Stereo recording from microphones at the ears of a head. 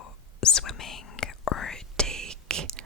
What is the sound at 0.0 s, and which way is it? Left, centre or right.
Whispering, left.